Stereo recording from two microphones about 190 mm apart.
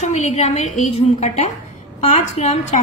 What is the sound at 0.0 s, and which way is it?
A woman's voice, 35° left (ahead or behind).